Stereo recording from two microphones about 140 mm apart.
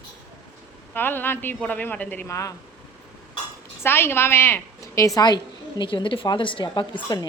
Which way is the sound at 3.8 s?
15° left (ahead or behind).